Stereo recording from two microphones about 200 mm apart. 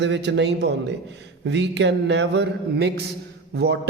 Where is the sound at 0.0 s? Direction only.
60° right (ahead or behind).